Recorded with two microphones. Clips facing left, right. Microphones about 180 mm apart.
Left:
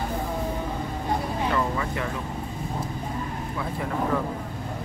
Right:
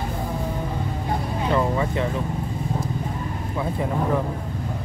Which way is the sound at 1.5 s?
25° right (ahead or behind).